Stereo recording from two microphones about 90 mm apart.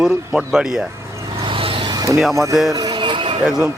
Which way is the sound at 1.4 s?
85° right.